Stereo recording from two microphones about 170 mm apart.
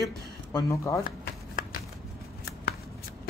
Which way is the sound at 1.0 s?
55° left (ahead or behind).